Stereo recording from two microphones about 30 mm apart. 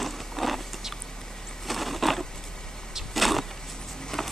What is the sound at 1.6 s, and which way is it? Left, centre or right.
Wild animals, centre.